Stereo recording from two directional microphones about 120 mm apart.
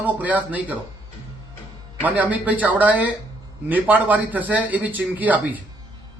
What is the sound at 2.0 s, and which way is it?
A man's voice, 15° right (ahead or behind).